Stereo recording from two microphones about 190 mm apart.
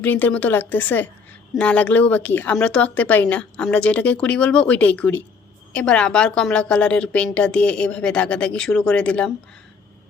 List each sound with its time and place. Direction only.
0.0 s speech: 10° left (ahead or behind)